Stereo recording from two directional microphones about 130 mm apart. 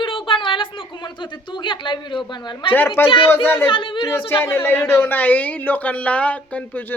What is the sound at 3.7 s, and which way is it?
Speech, 40° left (ahead or behind).